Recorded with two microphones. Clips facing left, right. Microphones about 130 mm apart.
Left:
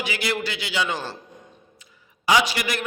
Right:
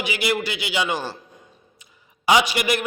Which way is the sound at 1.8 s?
20° right (ahead or behind).